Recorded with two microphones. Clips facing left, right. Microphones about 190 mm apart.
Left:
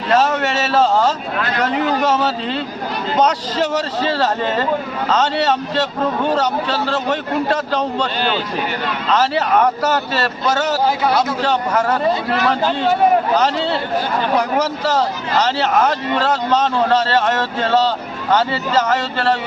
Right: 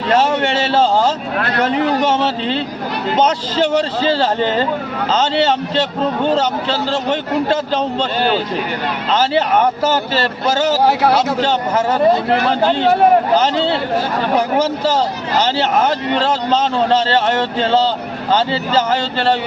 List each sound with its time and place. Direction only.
0.1 s a man's voice: 30° right (ahead or behind)
9.0 s a man's voice: 25° right (ahead or behind)
15.4 s a man's voice: 30° right (ahead or behind)